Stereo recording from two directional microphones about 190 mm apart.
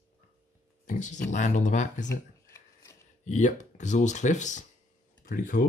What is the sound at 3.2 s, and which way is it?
Speech, 40° left (ahead or behind).